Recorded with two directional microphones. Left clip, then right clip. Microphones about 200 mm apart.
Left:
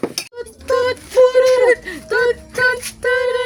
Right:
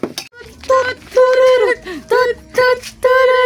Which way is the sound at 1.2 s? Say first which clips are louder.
Right 1 dB; centre (ahead or behind).